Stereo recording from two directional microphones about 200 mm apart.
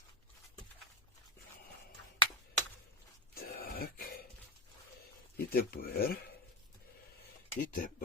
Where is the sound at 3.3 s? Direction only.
50° left (ahead or behind).